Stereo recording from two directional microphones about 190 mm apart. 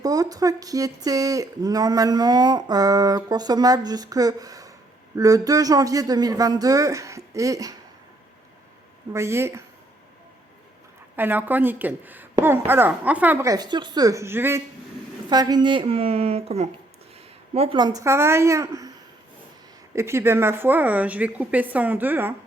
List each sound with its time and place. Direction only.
0.0 s a woman's voice: 20° right (ahead or behind)
9.1 s a woman's voice: 15° right (ahead or behind)
11.2 s a woman's voice: 10° right (ahead or behind)
20.0 s a woman's voice: 15° right (ahead or behind)